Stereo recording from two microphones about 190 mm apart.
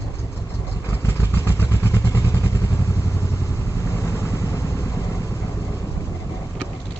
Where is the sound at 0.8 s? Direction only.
15° left (ahead or behind).